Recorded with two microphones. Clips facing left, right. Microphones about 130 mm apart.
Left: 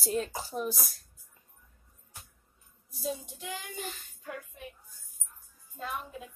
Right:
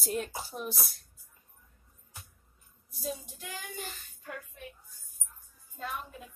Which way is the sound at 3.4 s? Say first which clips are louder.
Left 3 dB; 20° left (ahead or behind).